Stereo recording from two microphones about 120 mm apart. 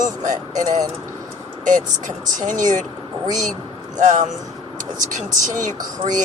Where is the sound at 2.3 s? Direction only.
90° right.